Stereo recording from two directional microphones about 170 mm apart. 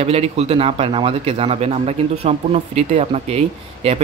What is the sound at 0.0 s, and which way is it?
A man's voice, 35° right (ahead or behind).